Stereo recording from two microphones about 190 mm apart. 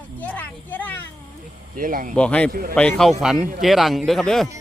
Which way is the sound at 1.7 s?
45° right (ahead or behind).